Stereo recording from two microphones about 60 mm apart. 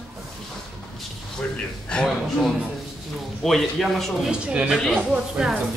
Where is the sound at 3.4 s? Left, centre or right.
Centre.